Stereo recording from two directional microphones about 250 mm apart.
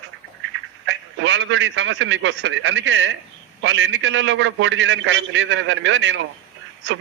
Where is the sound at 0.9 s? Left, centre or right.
Right.